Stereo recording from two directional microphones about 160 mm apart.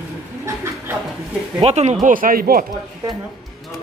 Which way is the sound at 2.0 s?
60° right (ahead or behind).